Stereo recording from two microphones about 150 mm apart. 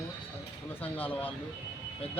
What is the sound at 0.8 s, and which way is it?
Speech, 10° left (ahead or behind).